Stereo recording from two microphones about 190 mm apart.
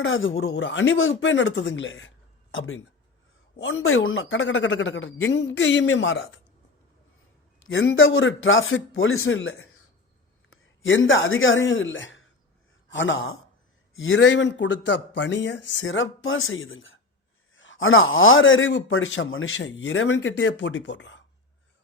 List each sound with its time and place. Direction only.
0.0 s speech: 90° left
7.7 s speech: 90° left